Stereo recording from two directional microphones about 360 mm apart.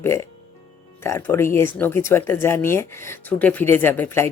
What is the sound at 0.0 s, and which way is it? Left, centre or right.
Speech, centre.